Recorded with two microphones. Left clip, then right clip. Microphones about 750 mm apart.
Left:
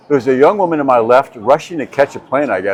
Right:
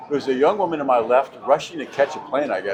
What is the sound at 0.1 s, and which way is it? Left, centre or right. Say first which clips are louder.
Speech: left 8 dB; left.